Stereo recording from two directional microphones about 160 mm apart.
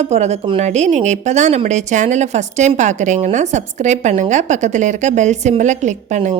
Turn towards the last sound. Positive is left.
turn(degrees=-50)  # may be behind; listen again after turning